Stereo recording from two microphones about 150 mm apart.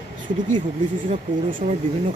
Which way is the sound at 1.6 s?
50° right (ahead or behind).